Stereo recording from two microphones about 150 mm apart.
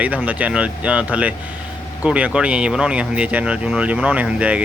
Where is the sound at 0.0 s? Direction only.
10° right (ahead or behind).